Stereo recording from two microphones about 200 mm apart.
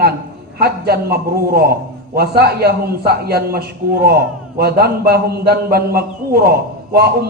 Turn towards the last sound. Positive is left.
turn(degrees=-50)  # may be behind; listen again after turning